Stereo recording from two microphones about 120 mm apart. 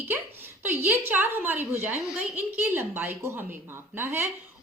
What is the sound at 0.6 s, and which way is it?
A woman's voice, 20° right (ahead or behind).